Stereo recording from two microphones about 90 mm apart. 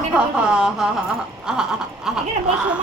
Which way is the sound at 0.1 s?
10° right (ahead or behind).